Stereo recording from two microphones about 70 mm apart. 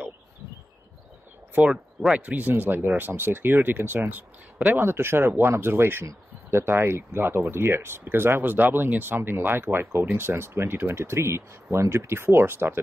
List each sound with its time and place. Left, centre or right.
1.6 s speech: centre; by 12.8 s right